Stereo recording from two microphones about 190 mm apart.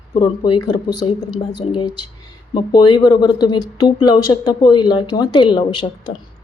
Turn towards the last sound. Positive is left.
turn(degrees=25)  # may be behind; listen again after turning